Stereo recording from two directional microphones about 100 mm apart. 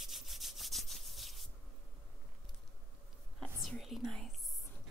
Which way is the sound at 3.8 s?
Centre (ahead or behind).